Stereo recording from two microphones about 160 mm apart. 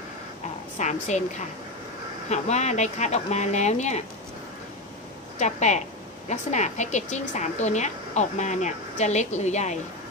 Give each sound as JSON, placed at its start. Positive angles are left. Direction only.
{"t": 0.7, "sound": "speech", "side_deg": 45}
{"t": 5.4, "sound": "speech", "side_deg": 45}